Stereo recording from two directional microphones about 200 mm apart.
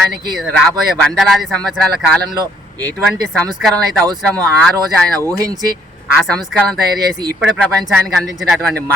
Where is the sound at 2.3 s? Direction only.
20° right (ahead or behind).